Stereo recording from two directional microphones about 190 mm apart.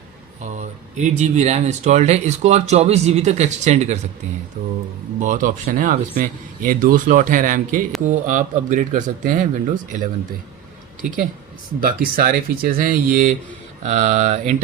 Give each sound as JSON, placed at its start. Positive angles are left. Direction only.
{"t": 0.4, "sound": "speech", "side_deg": -40}
{"t": 4.6, "sound": "speech", "side_deg": -50}
{"t": 11.8, "sound": "speech", "side_deg": -50}